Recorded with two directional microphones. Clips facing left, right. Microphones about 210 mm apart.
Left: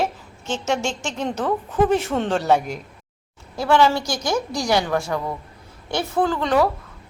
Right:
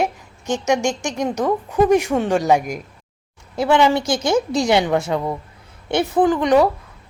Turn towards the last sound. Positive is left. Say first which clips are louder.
# right 5 dB
turn(degrees=-20)  # may be behind; listen again after turning